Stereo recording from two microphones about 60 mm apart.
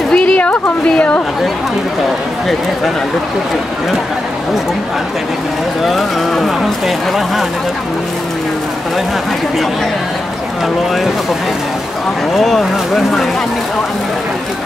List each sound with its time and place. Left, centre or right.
0.1 s a woman's voice: centre
5.9 s speech: centre
12.4 s speech: centre